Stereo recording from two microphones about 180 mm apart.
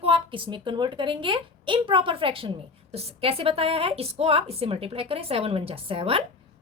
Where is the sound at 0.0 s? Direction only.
30° right (ahead or behind).